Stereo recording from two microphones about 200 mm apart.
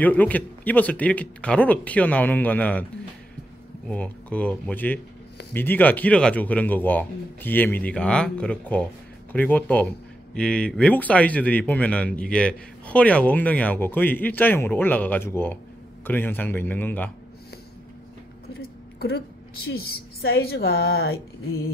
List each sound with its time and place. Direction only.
0.0 s speech: 10° left (ahead or behind)
3.9 s speech: 5° left (ahead or behind)
18.6 s a sound: 50° left (ahead or behind)
20.2 s a woman's voice: 55° left (ahead or behind)